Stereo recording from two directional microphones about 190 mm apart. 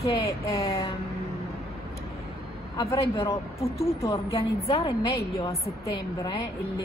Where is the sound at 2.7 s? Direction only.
15° left (ahead or behind).